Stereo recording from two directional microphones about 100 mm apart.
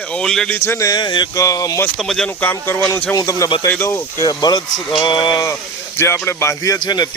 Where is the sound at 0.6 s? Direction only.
30° left (ahead or behind).